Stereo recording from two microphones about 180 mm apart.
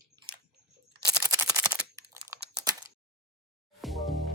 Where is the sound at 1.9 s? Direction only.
15° right (ahead or behind).